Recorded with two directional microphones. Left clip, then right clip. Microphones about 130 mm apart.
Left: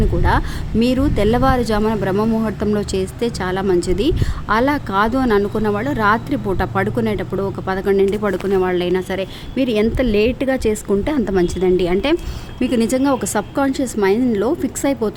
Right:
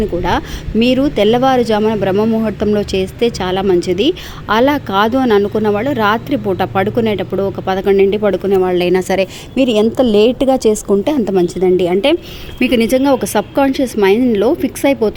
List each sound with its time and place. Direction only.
0.2 s a woman's voice: 10° right (ahead or behind)
2.7 s a woman's voice: 15° right (ahead or behind)
8.7 s a woman's voice: 45° right (ahead or behind)
9.0 s a woman's voice: 65° right (ahead or behind)
9.6 s a woman's voice: 35° right (ahead or behind); by 11.4 s 20° right (ahead or behind)
11.4 s a woman's voice: 5° right (ahead or behind)